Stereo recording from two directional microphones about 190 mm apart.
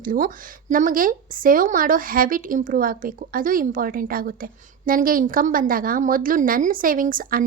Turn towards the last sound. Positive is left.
turn(degrees=-45)  # may be behind; listen again after turning